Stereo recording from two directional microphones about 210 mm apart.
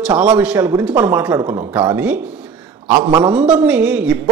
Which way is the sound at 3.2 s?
5° right (ahead or behind).